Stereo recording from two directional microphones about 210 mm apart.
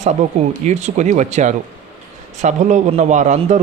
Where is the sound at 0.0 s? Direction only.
35° right (ahead or behind).